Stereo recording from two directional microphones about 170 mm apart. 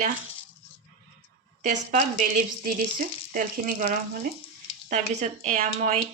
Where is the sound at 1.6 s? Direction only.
50° right (ahead or behind).